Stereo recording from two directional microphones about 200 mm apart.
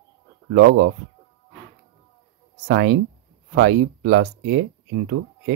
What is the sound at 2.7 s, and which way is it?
Speech, 55° right (ahead or behind).